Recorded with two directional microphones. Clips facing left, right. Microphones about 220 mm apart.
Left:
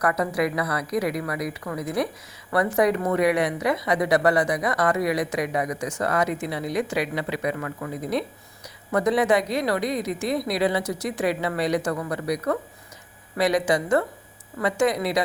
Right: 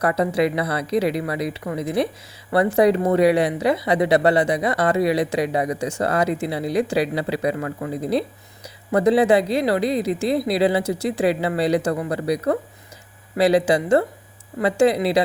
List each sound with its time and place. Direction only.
0.0 s speech: 25° right (ahead or behind)